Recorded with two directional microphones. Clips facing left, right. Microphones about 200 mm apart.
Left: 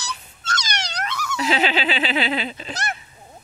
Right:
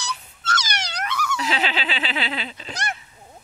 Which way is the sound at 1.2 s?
10° left (ahead or behind).